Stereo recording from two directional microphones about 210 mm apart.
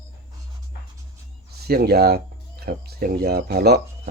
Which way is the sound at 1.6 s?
50° right (ahead or behind).